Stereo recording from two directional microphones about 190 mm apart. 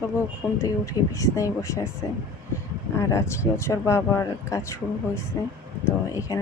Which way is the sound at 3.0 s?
15° left (ahead or behind).